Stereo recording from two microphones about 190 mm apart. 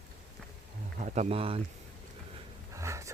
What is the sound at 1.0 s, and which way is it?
Speech, 40° right (ahead or behind).